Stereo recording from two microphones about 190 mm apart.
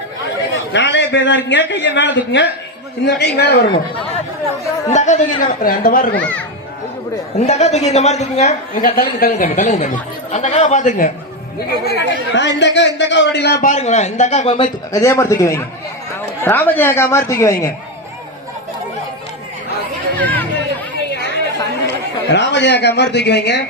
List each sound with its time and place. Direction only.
0.7 s a man's voice: 70° left (ahead or behind)
4.9 s a woman's voice: 40° left (ahead or behind)
6.1 s speech: 10° left (ahead or behind)
7.3 s a woman's voice: 35° left (ahead or behind)
9.0 s a woman's voice: 45° left (ahead or behind)
11.9 s speech: 65° left (ahead or behind); by 15.0 s 25° left (ahead or behind)
15.0 s speech: 15° left (ahead or behind)
20.1 s chatter: 10° left (ahead or behind)
21.8 s a man's voice: 65° left (ahead or behind)